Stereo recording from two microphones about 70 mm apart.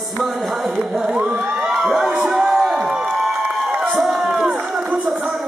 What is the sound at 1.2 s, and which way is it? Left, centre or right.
Crowd, right.